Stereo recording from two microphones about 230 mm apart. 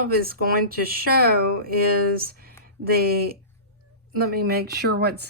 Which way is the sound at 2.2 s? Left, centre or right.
Right.